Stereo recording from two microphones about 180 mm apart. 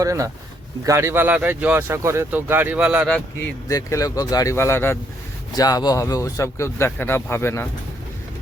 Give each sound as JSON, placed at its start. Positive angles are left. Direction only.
{"t": 0.0, "sound": "speech", "side_deg": -15}
{"t": 3.7, "sound": "speech", "side_deg": 20}